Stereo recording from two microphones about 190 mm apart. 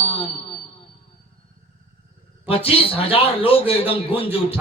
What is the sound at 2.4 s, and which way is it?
A man's voice, 30° left (ahead or behind).